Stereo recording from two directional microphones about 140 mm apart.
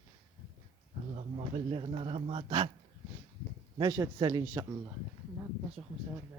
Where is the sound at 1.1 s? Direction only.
45° right (ahead or behind).